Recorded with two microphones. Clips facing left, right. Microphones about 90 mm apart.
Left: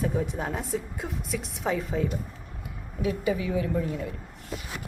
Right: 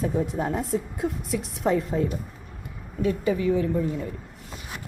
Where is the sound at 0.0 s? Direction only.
Centre (ahead or behind).